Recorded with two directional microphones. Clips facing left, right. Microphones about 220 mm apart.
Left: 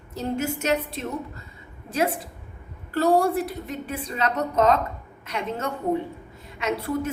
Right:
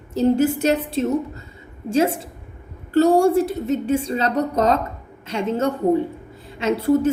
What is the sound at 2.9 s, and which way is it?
A woman's voice, 25° right (ahead or behind).